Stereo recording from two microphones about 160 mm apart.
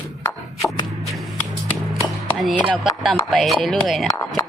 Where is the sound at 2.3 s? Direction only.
Centre (ahead or behind).